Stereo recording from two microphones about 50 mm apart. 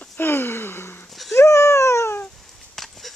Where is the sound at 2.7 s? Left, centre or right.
Centre.